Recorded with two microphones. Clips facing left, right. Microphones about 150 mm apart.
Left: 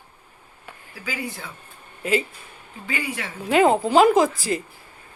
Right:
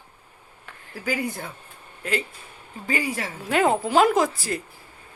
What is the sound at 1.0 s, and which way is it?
Speech, 50° right (ahead or behind).